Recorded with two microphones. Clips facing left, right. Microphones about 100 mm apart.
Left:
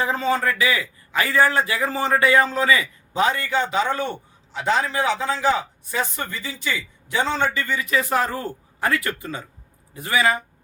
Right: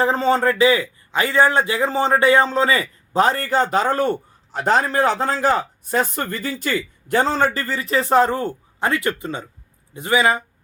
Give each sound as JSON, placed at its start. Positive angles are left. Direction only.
{"t": 0.0, "sound": "a man's voice", "side_deg": -30}